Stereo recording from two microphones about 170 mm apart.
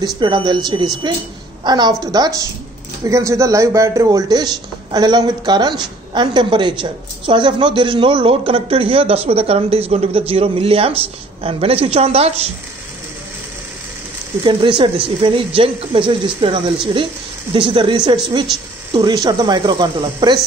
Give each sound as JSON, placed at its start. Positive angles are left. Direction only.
{"t": 0.2, "sound": "a woman's voice", "side_deg": -25}
{"t": 14.4, "sound": "speech", "side_deg": -30}